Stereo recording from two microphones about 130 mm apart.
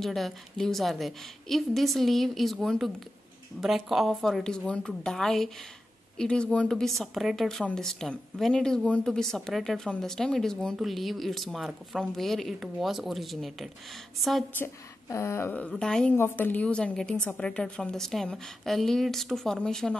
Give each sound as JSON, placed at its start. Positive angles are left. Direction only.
{"t": 0.0, "sound": "speech", "side_deg": 0}
{"t": 14.6, "sound": "speech", "side_deg": 20}
{"t": 15.7, "sound": "speech", "side_deg": 5}